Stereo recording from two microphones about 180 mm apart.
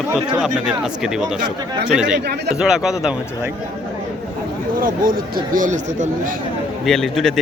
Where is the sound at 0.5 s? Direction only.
5° right (ahead or behind).